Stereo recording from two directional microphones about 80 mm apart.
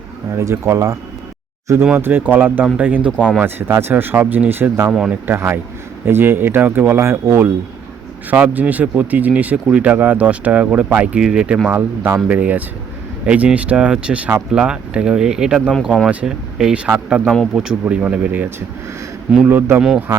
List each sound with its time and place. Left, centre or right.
0.3 s speech: right
2.0 s speech: right
3.4 s speech: right
8.3 s speech: centre
11.7 s speech: right